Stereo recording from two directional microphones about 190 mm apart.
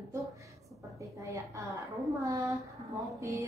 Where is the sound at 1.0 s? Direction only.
15° right (ahead or behind).